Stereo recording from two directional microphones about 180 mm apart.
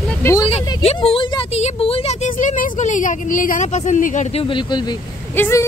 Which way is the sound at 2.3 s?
45° left (ahead or behind).